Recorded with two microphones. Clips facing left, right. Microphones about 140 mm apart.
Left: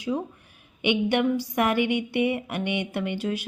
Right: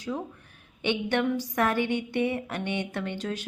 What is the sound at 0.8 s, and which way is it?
A woman's voice, 15° left (ahead or behind).